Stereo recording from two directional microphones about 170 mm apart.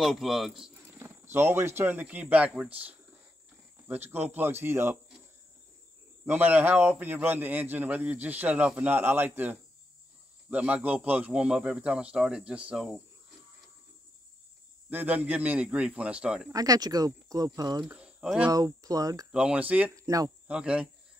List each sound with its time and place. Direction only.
0.0 s speech: centre (ahead or behind)
0.9 s a sound: 15° right (ahead or behind)
1.8 s a man's voice: 10° right (ahead or behind)
6.2 s a man's voice: 10° right (ahead or behind)
14.9 s a man's voice: 10° right (ahead or behind)
16.5 s speech: 20° right (ahead or behind)
17.8 s speech: 5° right (ahead or behind)
18.5 s speech: 20° right (ahead or behind)
19.3 s a man's voice: 5° right (ahead or behind)
19.9 s speech: 20° right (ahead or behind)
20.4 s a man's voice: 5° right (ahead or behind)